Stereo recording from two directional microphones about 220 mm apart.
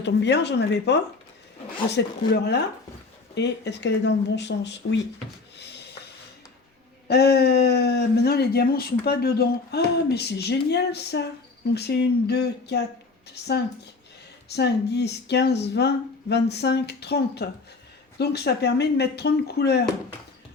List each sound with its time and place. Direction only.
0.0 s speech: 50° left (ahead or behind)
7.1 s speech: 45° left (ahead or behind)
14.5 s speech: 50° left (ahead or behind)